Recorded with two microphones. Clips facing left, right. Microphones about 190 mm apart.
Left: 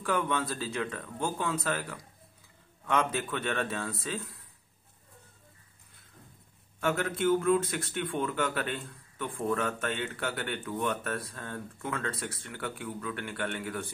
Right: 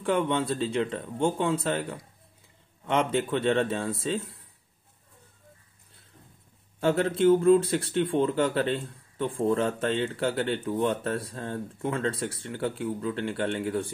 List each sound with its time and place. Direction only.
0.0 s speech: 25° right (ahead or behind)
6.8 s speech: 30° right (ahead or behind)